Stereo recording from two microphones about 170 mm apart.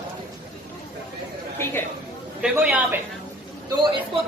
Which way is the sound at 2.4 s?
5° right (ahead or behind).